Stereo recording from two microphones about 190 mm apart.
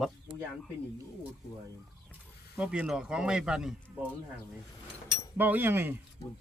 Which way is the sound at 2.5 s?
5° right (ahead or behind).